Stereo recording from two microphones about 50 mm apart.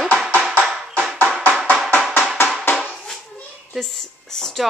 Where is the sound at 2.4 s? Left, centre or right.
Left.